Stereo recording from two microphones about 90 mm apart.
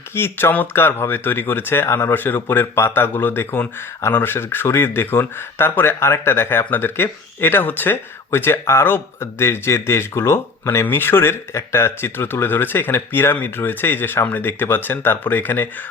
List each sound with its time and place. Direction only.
0.1 s speech: 25° left (ahead or behind)